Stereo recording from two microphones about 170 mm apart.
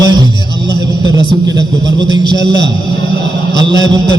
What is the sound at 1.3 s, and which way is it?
A man's voice, 25° right (ahead or behind).